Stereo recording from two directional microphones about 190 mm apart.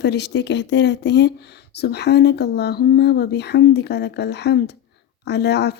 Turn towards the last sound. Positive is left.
turn(degrees=60)  # may be behind; listen again after turning